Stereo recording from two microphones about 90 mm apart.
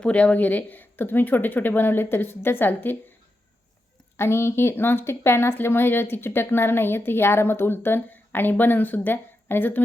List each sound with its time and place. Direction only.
0.0 s speech: 15° left (ahead or behind)
4.2 s speech: 30° left (ahead or behind)